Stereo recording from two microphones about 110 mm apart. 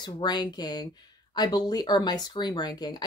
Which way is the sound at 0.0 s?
40° left (ahead or behind).